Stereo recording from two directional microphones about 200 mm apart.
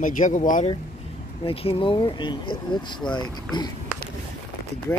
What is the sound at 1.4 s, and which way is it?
Speech, 25° left (ahead or behind).